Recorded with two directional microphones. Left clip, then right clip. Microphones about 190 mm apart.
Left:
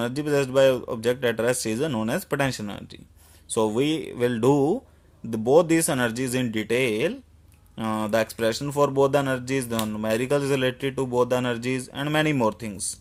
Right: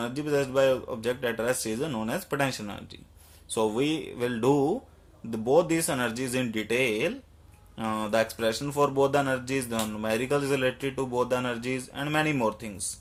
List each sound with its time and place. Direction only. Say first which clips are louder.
0.0 s speech: left 4 dB; 45° left (ahead or behind)